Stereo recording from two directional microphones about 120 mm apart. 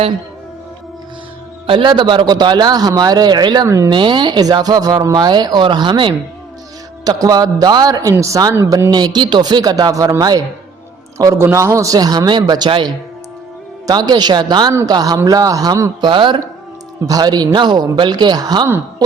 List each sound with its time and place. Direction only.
1.6 s speech: 45° right (ahead or behind)
7.0 s speech: 30° right (ahead or behind)